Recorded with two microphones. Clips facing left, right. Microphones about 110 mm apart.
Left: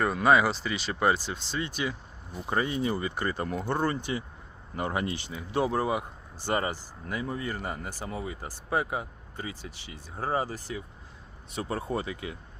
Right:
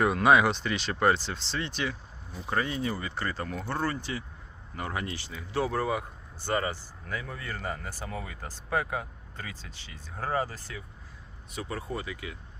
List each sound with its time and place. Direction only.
0.0 s speech: centre (ahead or behind); by 10.8 s 15° left (ahead or behind)
11.5 s speech: 30° left (ahead or behind)